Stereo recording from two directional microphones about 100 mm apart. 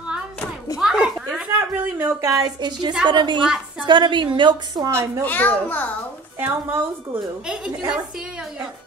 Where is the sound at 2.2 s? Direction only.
40° right (ahead or behind).